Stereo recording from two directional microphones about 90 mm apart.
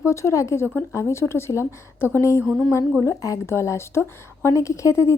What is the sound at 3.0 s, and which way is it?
A woman's voice, 35° left (ahead or behind).